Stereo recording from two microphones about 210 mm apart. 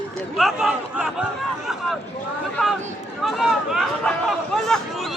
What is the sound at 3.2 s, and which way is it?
Speech, centre (ahead or behind).